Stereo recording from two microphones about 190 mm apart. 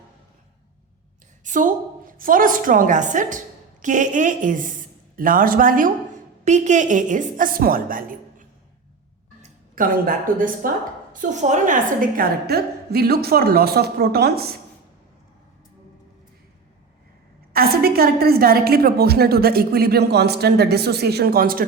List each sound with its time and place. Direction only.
1.5 s a woman's voice: 45° right (ahead or behind)
17.5 s a woman's voice: 55° right (ahead or behind)